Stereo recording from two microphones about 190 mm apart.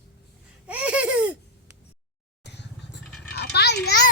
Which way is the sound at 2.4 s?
65° left (ahead or behind).